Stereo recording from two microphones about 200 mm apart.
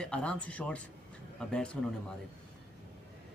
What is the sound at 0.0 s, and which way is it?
A man's voice, 5° left (ahead or behind).